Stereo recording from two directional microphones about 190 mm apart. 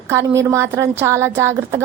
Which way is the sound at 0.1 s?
15° right (ahead or behind).